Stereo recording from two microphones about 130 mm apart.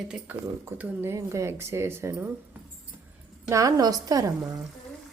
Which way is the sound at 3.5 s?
25° right (ahead or behind).